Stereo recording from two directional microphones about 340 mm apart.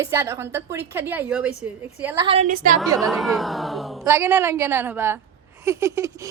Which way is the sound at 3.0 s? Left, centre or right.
Centre.